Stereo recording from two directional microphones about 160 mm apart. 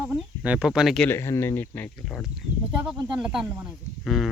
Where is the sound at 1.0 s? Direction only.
15° left (ahead or behind).